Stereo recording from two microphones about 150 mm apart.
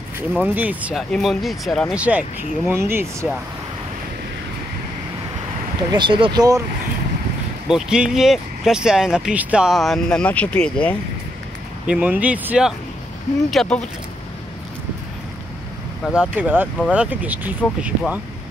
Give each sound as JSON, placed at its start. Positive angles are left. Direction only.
{"t": 0.4, "sound": "speech", "side_deg": -10}
{"t": 1.1, "sound": "speech", "side_deg": 0}
{"t": 2.0, "sound": "speech", "side_deg": -10}
{"t": 5.8, "sound": "speech", "side_deg": -30}
{"t": 7.6, "sound": "speech", "side_deg": -5}
{"t": 11.9, "sound": "speech", "side_deg": -10}
{"t": 13.5, "sound": "speech", "side_deg": 5}
{"t": 16.1, "sound": "speech", "side_deg": -5}